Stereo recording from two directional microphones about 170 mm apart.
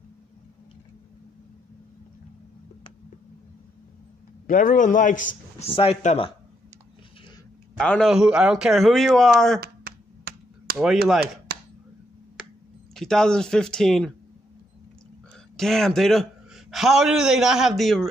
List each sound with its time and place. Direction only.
4.5 s speech: 55° left (ahead or behind)
5.8 s speech: 35° left (ahead or behind)
7.7 s a man's voice: 5° left (ahead or behind)
9.6 s finger snapping: 65° right (ahead or behind)
11.5 s a sound: 75° right (ahead or behind)
12.9 s a man's voice: 5° left (ahead or behind)
15.5 s a man's voice: centre (ahead or behind)